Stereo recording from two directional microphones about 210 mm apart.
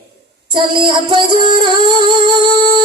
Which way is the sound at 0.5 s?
25° right (ahead or behind).